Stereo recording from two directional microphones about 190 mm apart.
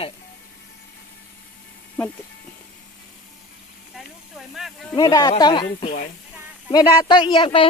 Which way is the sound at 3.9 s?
Centre (ahead or behind).